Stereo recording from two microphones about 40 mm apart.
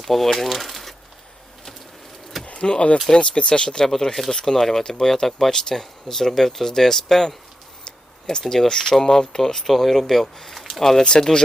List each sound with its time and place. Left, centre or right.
0.0 s speech: centre
2.4 s a sound: left
3.2 s speech: left
3.8 s speech: centre
11.0 s speech: centre